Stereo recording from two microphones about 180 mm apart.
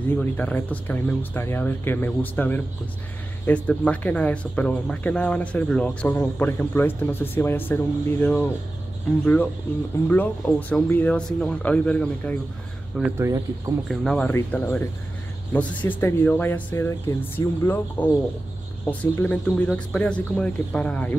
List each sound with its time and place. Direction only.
0.1 s speech: 10° left (ahead or behind)
10.7 s speech: 10° left (ahead or behind)
13.2 s speech: 20° right (ahead or behind)
13.8 s speech: 5° left (ahead or behind)